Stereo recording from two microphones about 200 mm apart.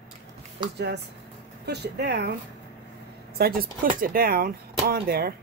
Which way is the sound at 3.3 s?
50° right (ahead or behind).